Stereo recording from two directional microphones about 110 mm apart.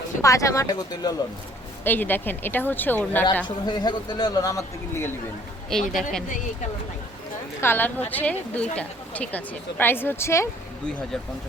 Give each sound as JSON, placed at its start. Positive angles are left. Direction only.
{"t": 0.2, "sound": "speech", "side_deg": 30}
{"t": 1.8, "sound": "a woman's voice", "side_deg": 15}
{"t": 3.4, "sound": "a man's voice", "side_deg": 40}
{"t": 5.7, "sound": "speech", "side_deg": 5}
{"t": 7.6, "sound": "a woman's voice", "side_deg": 20}